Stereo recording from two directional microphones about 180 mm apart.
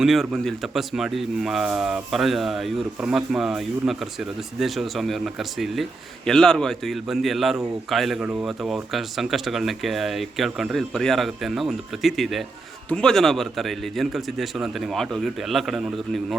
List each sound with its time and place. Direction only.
0.0 s speech: centre (ahead or behind)